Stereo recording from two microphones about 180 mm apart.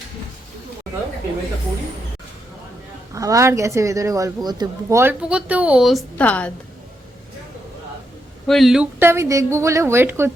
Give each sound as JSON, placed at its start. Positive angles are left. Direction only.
{"t": 3.1, "sound": "speech", "side_deg": -20}
{"t": 8.4, "sound": "speech", "side_deg": 0}